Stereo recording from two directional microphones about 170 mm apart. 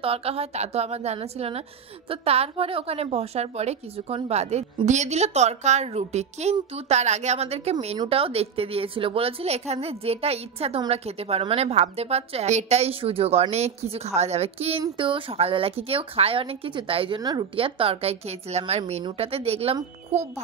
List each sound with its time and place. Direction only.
0.0 s a woman's voice: 35° right (ahead or behind)